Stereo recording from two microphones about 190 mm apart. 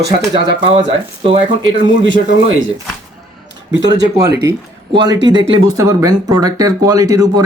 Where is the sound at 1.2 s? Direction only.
30° right (ahead or behind).